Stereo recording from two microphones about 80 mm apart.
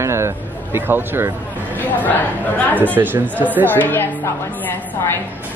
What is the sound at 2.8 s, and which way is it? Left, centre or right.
Speech, right.